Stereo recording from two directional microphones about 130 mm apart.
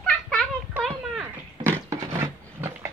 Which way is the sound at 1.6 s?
20° right (ahead or behind).